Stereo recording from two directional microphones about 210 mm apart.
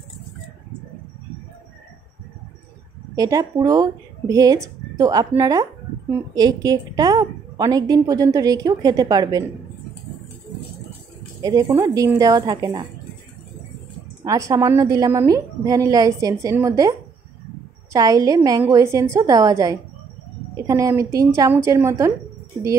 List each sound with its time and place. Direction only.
3.2 s a woman's voice: 15° right (ahead or behind)
11.4 s a woman's voice: 15° right (ahead or behind)
14.2 s a woman's voice: 15° right (ahead or behind)
17.9 s a woman's voice: 15° right (ahead or behind)